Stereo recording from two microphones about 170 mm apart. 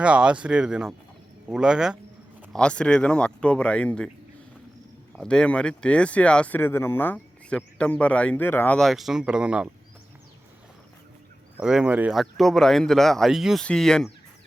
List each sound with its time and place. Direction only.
0.0 s speech: 5° right (ahead or behind)
5.1 s speech: 5° left (ahead or behind)
11.5 s speech: 5° right (ahead or behind)
12.2 s speech: centre (ahead or behind)